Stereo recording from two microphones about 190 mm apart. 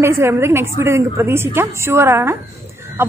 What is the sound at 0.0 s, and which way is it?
A woman's voice, 15° right (ahead or behind).